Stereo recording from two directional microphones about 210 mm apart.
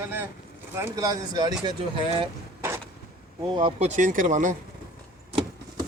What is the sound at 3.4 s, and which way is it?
Speech, 25° right (ahead or behind).